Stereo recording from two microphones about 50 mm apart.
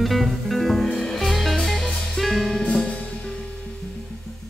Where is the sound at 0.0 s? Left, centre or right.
Centre.